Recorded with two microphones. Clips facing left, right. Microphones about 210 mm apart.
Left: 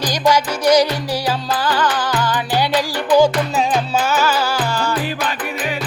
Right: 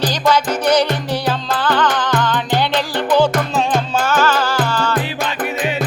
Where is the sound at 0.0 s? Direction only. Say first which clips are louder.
Even; 10° left (ahead or behind).